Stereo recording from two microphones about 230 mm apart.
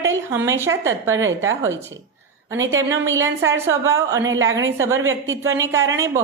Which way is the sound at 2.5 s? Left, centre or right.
Right.